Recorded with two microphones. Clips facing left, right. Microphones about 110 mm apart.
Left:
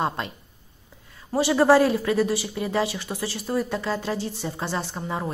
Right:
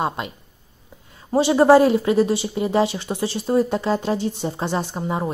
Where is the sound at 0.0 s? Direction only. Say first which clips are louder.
Right 2 dB; 15° right (ahead or behind).